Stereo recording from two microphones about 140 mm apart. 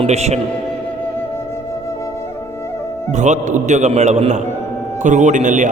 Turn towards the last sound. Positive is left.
turn(degrees=-60)  # may be behind; listen again after turning